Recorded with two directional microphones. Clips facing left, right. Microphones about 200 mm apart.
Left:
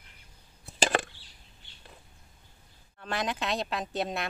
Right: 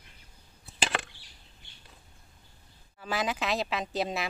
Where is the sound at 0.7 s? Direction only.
45° left (ahead or behind).